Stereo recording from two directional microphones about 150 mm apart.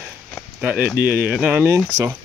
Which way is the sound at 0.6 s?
10° right (ahead or behind).